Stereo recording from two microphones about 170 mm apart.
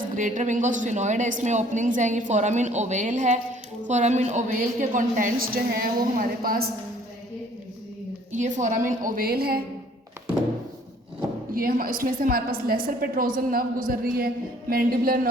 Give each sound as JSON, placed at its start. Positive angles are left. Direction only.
{"t": 0.2, "sound": "a woman's voice", "side_deg": -45}
{"t": 8.3, "sound": "a woman's voice", "side_deg": -45}
{"t": 11.5, "sound": "a woman's voice", "side_deg": -55}